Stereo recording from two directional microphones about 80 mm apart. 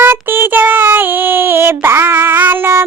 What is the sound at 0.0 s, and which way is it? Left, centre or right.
Child singing, right.